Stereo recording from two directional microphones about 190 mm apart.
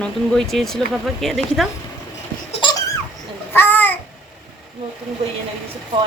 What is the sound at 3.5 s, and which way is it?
Babbling, 10° left (ahead or behind).